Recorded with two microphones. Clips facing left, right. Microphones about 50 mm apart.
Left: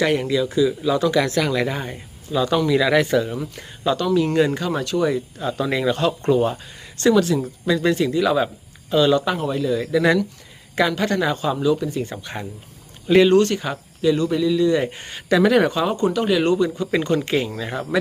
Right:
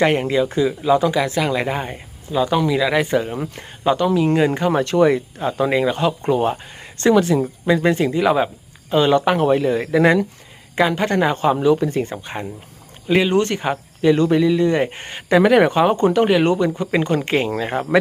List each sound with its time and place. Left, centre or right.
0.0 s speech: right
1.1 s speech: centre
1.5 s speech: right; by 3.0 s centre
3.0 s speech: right
3.9 s speech: centre
6.3 s speech: right
12.2 s speech: right
13.1 s speech: centre
13.4 s speech: right